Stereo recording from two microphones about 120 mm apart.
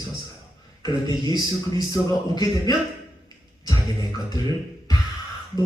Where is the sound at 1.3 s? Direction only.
35° left (ahead or behind).